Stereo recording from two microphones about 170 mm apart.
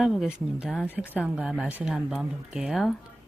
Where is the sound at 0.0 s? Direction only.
Centre (ahead or behind).